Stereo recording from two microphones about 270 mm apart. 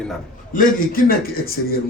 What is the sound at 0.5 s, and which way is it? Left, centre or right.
Speech, left.